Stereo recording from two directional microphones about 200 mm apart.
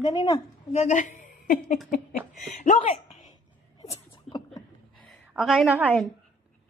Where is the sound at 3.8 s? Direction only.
30° left (ahead or behind).